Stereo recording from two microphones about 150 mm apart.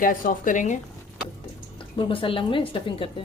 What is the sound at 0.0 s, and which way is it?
Speech, 65° left (ahead or behind).